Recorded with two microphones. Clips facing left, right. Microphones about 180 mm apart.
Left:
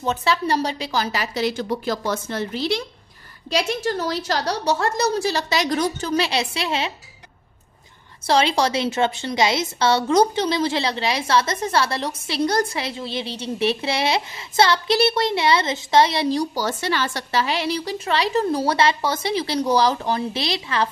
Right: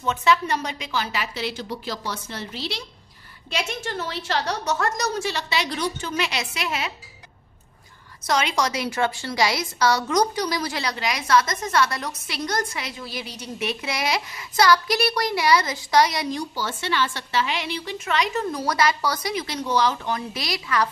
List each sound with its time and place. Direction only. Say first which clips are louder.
0.0 s a woman's voice: even; 35° left (ahead or behind); by 2.8 s 50° left (ahead or behind)
3.4 s a woman's voice: left 7 dB; 35° left (ahead or behind)
8.3 s a woman's voice: left 4 dB; 30° left (ahead or behind)